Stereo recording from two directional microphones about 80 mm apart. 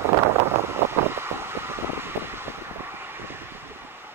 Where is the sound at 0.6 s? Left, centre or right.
Right.